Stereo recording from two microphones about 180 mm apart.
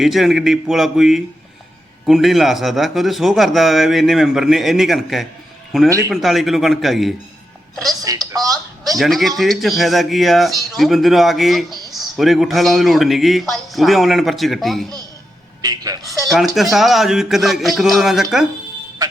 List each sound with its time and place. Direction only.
0.0 s speech: centre (ahead or behind)
8.0 s speech: 20° right (ahead or behind)
8.9 s speech: centre (ahead or behind)
15.6 s a sound: 20° right (ahead or behind)
16.6 s speech: centre (ahead or behind)